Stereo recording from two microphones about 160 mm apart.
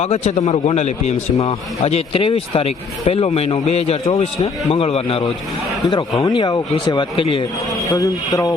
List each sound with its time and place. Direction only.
0.0 s a man's voice: 45° left (ahead or behind)
5.8 s speech: 25° left (ahead or behind)
7.9 s speech: 20° left (ahead or behind)